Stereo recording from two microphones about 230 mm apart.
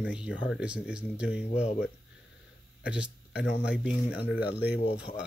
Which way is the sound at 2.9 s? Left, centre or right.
Centre.